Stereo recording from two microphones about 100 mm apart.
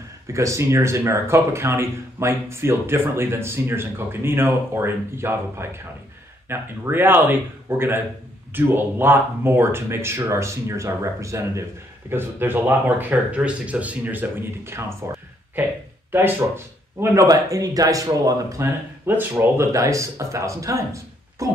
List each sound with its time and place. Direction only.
0.3 s speech: 30° right (ahead or behind)
16.1 s speech: 25° right (ahead or behind)
17.3 s speech: 35° right (ahead or behind)
19.0 s speech: 20° right (ahead or behind)